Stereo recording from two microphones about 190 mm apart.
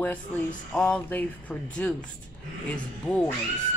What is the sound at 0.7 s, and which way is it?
A man's voice, 10° left (ahead or behind).